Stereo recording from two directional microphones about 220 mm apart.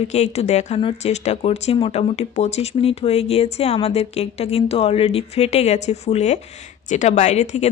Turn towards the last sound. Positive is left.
turn(degrees=30)  # may be behind; listen again after turning